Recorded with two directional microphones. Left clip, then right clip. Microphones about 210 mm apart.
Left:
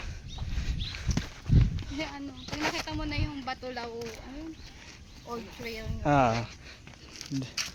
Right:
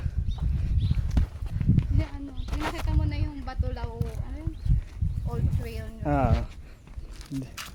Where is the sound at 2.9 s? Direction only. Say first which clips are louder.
Left 2 dB; 30° left (ahead or behind).